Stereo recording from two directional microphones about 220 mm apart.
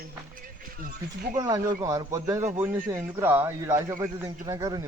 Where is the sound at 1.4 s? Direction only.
15° right (ahead or behind).